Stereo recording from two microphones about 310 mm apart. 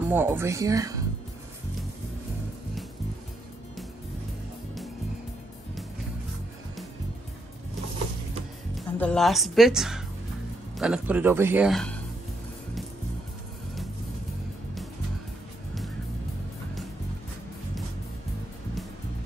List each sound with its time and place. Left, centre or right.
0.1 s speech: centre
8.7 s a woman's voice: centre